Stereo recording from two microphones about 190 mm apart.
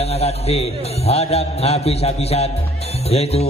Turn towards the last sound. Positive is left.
turn(degrees=35)  # may be behind; listen again after turning